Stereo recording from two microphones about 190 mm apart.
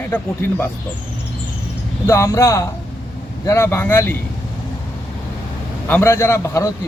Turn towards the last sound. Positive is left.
turn(degrees=15)  # may be behind; listen again after turning